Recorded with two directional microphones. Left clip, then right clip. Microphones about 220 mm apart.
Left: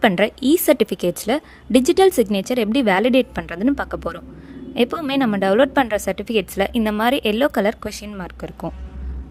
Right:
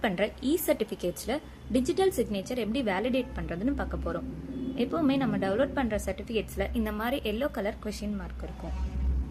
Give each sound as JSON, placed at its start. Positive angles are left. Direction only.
{"t": 0.0, "sound": "a woman's voice", "side_deg": 55}